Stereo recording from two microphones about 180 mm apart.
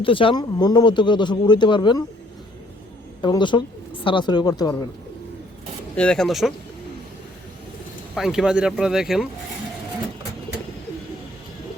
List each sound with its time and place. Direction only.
0.0 s speech: 30° left (ahead or behind)
3.2 s speech: 25° left (ahead or behind)
6.0 s speech: 5° left (ahead or behind)
8.1 s speech: centre (ahead or behind)